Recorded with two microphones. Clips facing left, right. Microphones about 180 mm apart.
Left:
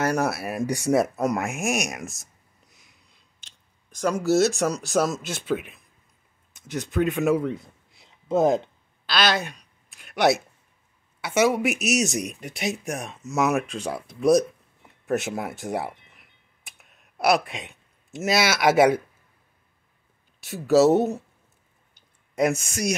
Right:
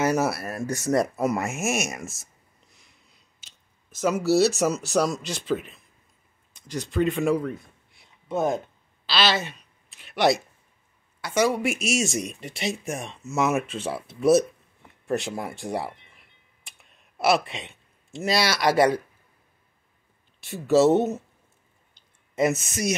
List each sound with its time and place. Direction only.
0.0 s speech: 5° right (ahead or behind)
0.4 s speech: 15° left (ahead or behind); by 2.2 s centre (ahead or behind)
2.7 s a sound: centre (ahead or behind)
4.3 s speech: centre (ahead or behind)
6.9 s speech: centre (ahead or behind)
8.3 s speech: 25° left (ahead or behind)
9.0 s a woman's voice: centre (ahead or behind)
16.6 s a sound: centre (ahead or behind)
18.5 s speech: 5° left (ahead or behind)
20.6 s speech: centre (ahead or behind)
20.9 s speech: 35° left (ahead or behind)
22.3 s a sound: 5° right (ahead or behind)
22.7 s speech: 5° right (ahead or behind)